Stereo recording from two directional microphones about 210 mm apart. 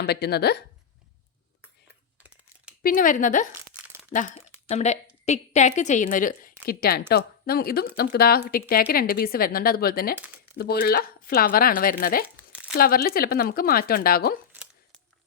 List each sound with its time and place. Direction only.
0.0 s speech: 50° left (ahead or behind)
2.8 s a woman's voice: 40° left (ahead or behind)
3.7 s crumpling: 65° right (ahead or behind)
4.1 s a woman's voice: 35° left (ahead or behind)